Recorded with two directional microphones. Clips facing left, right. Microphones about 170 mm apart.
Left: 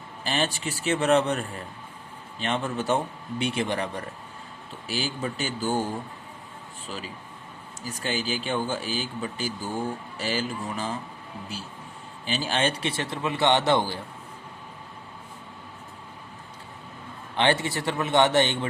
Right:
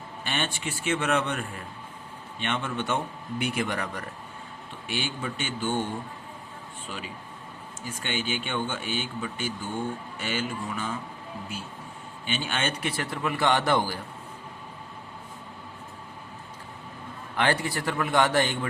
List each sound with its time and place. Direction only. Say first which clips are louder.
0.3 s speech: left 4 dB; 35° left (ahead or behind)
12.2 s a man's voice: left 4 dB; 35° left (ahead or behind)
17.3 s a man's voice: left 2 dB; 25° left (ahead or behind)